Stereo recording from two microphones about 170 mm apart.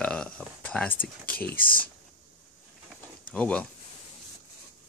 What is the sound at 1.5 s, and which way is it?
Speech, 55° left (ahead or behind).